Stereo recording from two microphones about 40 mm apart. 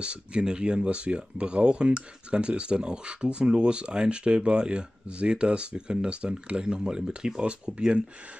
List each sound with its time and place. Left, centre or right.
0.0 s speech: right